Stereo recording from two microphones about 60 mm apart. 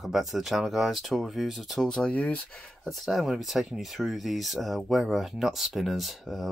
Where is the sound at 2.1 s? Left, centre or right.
Left.